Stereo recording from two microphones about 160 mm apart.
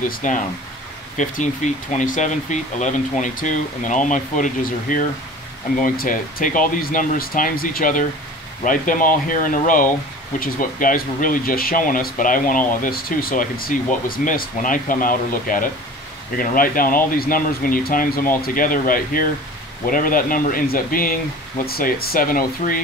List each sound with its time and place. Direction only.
0.1 s speech: 55° left (ahead or behind)